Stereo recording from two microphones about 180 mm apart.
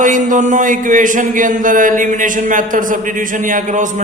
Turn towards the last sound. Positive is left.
turn(degrees=-45)  # may be behind; listen again after turning